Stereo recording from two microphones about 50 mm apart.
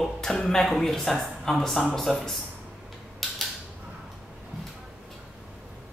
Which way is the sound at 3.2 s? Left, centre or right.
Centre.